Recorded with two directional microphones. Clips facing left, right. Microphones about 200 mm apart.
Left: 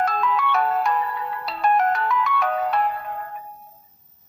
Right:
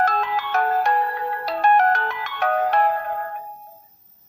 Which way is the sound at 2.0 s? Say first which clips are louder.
Left 1 dB; 65° right (ahead or behind).